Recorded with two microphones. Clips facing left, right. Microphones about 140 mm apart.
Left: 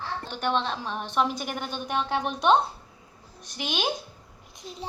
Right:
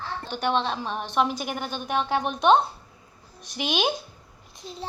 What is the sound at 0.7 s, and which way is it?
Speech, 5° right (ahead or behind).